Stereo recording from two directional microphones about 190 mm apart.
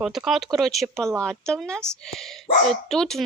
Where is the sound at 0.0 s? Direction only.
Centre (ahead or behind).